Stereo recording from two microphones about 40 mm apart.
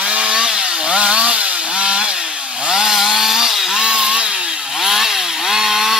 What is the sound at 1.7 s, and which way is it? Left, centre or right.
Chainsaw, right.